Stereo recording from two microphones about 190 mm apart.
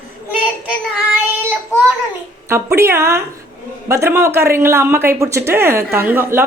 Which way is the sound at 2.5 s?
15° right (ahead or behind).